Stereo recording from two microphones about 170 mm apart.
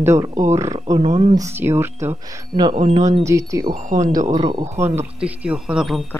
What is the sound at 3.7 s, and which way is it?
Speech, 45° right (ahead or behind).